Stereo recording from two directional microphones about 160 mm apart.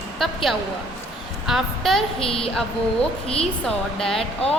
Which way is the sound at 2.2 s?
35° left (ahead or behind).